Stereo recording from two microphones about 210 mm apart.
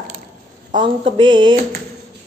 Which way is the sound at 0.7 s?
20° right (ahead or behind).